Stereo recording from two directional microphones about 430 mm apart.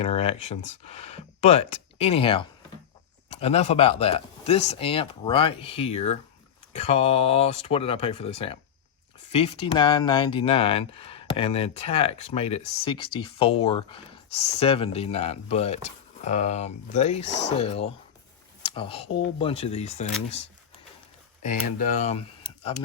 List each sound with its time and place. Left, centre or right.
0.0 s speech: centre
21.4 s speech: centre